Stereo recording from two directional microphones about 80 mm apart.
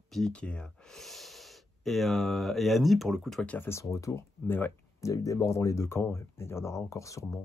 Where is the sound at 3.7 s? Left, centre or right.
Left.